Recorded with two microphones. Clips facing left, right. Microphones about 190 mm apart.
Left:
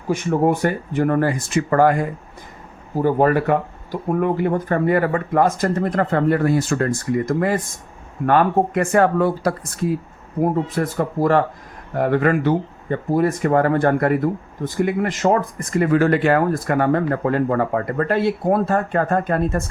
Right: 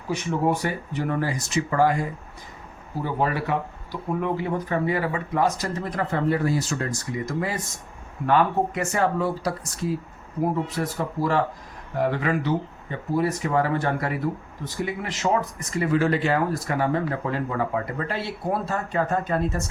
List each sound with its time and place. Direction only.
0.1 s speech: 50° left (ahead or behind)